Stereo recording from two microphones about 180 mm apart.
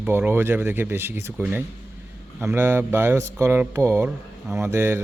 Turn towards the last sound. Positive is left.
turn(degrees=-10)  # may be behind; listen again after turning